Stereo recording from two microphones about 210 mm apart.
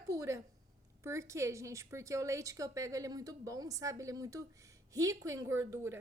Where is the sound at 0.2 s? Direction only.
15° right (ahead or behind).